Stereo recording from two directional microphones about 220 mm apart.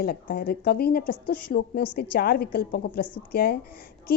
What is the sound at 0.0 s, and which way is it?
A woman's voice, 45° left (ahead or behind).